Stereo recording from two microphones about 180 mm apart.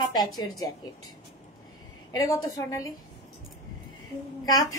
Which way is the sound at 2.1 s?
20° left (ahead or behind).